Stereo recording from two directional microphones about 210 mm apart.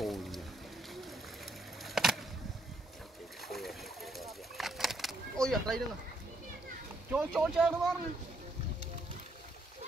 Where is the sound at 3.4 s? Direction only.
Centre (ahead or behind).